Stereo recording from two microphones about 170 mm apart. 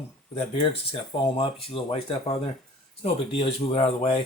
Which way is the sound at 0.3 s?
35° left (ahead or behind).